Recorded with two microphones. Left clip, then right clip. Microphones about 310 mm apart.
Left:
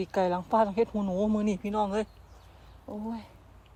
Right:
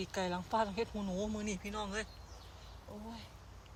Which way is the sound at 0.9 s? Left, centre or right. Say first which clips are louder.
Left 10 dB; left.